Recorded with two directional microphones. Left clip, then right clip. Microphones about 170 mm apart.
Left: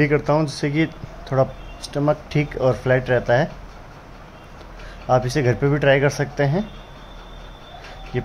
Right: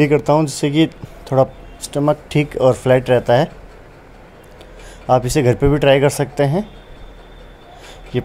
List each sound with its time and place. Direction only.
0.0 s speech: 25° right (ahead or behind)
5.0 s speech: 20° right (ahead or behind)
8.1 s speech: 25° right (ahead or behind)